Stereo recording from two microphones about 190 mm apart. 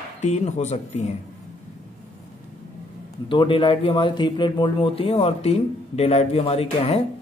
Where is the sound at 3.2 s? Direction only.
25° left (ahead or behind).